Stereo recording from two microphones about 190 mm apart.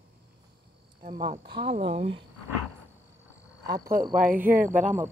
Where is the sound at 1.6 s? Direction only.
30° right (ahead or behind).